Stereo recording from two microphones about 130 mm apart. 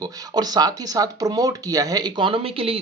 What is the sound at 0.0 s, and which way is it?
Speech, 30° right (ahead or behind).